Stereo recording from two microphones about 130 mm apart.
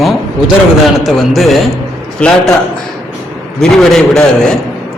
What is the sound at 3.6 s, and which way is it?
Speech, 5° left (ahead or behind).